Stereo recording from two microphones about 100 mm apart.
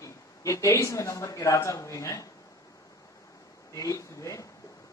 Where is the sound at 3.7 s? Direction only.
35° left (ahead or behind).